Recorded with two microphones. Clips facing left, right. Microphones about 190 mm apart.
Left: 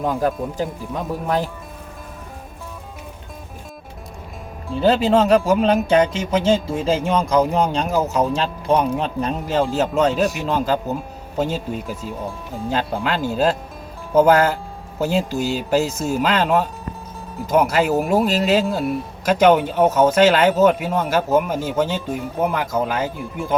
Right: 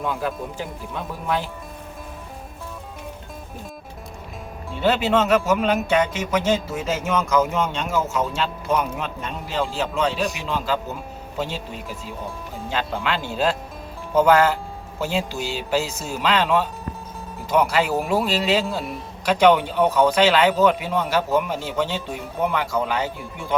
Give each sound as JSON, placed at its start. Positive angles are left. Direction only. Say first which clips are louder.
{"t": 0.0, "sound": "music", "louder": "left 5 dB", "side_deg": 40}
{"t": 4.8, "sound": "music", "louder": "left 4 dB", "side_deg": 35}
{"t": 10.3, "sound": "speech", "louder": "left 5 dB", "side_deg": 45}
{"t": 12.7, "sound": "music", "louder": "left 3 dB", "side_deg": 40}
{"t": 14.2, "sound": "speech", "louder": "left 2 dB", "side_deg": 40}
{"t": 22.0, "sound": "speech", "louder": "left 6 dB", "side_deg": 0}
{"t": 22.5, "sound": "speech", "louder": "left 2 dB", "side_deg": 40}
{"t": 23.1, "sound": "speech", "louder": "left 6 dB", "side_deg": 0}